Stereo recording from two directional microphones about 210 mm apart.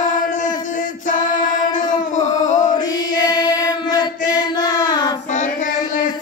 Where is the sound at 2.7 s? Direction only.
20° left (ahead or behind).